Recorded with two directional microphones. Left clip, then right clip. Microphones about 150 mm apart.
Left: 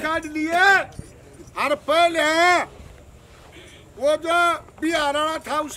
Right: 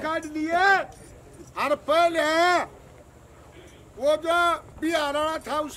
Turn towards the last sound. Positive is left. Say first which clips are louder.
# left 3 dB
turn(degrees=0)  # may be behind; listen again after turning